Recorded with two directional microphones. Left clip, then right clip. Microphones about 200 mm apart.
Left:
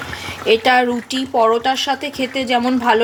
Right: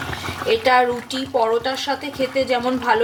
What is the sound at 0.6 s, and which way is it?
Speech, 40° left (ahead or behind).